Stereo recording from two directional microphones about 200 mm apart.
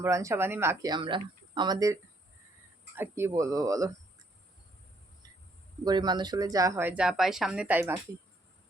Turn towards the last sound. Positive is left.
turn(degrees=-10)  # may be behind; listen again after turning